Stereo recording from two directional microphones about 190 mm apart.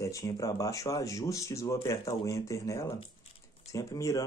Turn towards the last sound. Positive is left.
turn(degrees=15)  # may be behind; listen again after turning